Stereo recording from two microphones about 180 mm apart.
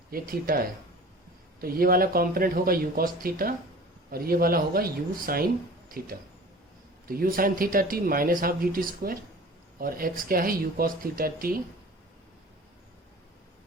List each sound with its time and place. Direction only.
0.1 s speech: 55° right (ahead or behind)
1.6 s speech: 55° right (ahead or behind)